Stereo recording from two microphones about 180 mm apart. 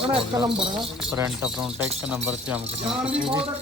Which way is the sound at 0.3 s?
25° right (ahead or behind).